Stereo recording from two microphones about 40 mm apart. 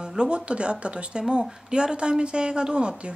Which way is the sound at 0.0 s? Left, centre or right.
Right.